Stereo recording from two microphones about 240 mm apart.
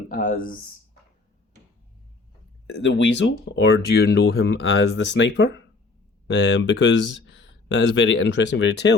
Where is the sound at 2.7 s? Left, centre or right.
Left.